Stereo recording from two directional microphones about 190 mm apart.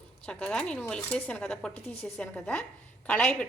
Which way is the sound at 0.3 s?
5° left (ahead or behind).